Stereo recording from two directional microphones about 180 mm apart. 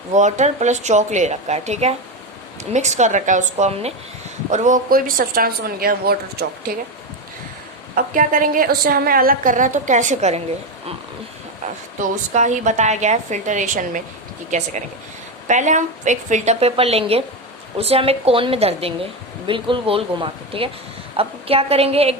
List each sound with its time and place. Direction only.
0.1 s a woman's voice: 40° right (ahead or behind); by 6.1 s 55° right (ahead or behind)
7.9 s a woman's voice: 50° right (ahead or behind)
11.9 s a woman's voice: 40° right (ahead or behind)